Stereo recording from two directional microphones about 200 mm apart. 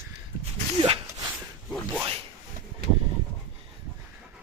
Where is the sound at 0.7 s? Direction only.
25° right (ahead or behind).